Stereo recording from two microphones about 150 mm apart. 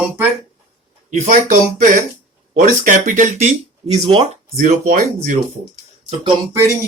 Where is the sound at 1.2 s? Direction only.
60° right (ahead or behind).